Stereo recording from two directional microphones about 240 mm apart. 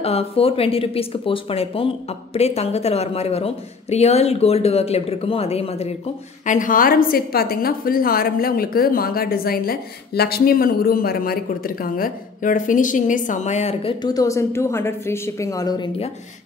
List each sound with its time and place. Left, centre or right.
0.0 s a woman's voice: left